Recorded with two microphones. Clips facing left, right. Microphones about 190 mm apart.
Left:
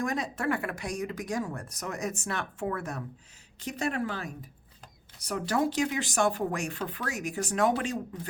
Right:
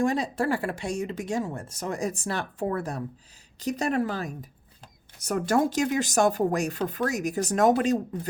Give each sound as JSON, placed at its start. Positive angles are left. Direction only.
{"t": 0.0, "sound": "speech", "side_deg": -30}